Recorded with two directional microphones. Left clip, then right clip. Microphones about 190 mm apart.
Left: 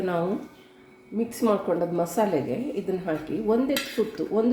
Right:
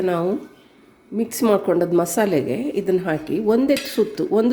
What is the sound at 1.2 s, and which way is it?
A woman's voice, 40° right (ahead or behind).